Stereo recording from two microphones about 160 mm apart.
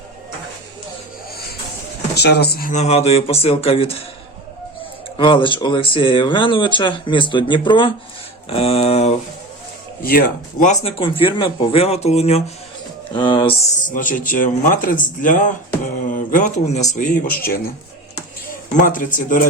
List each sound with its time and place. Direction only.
2.1 s speech: 90° left
2.7 s speech: 40° left (ahead or behind)
5.1 s speech: 30° left (ahead or behind)
10.0 s speech: 65° left (ahead or behind)
10.7 s speech: 35° left (ahead or behind)
13.8 s speech: 55° left (ahead or behind)
18.7 s speech: 55° left (ahead or behind)